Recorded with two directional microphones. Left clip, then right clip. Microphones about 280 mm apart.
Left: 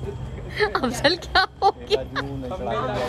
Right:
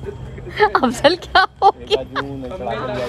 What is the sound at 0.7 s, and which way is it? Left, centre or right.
Speech, centre.